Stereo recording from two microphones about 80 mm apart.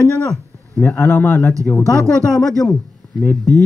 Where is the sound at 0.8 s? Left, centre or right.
Left.